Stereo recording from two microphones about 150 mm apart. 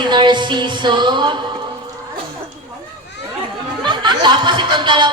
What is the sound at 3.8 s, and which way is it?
Speech, 30° right (ahead or behind).